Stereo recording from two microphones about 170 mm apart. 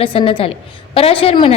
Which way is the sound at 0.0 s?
30° left (ahead or behind).